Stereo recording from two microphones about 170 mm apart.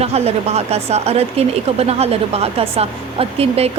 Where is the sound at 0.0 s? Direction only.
40° right (ahead or behind).